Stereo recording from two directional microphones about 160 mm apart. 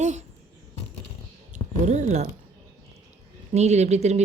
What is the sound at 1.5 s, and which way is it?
Speech, 50° right (ahead or behind).